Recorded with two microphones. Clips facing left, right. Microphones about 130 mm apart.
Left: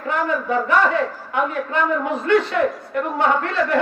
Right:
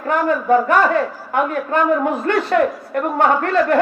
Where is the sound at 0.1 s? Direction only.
45° right (ahead or behind).